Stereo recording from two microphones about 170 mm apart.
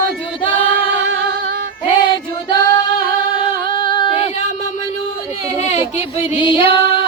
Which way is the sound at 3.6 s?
30° left (ahead or behind).